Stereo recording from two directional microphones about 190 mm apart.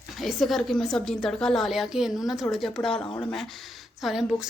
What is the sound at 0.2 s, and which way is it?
A woman's voice, centre (ahead or behind).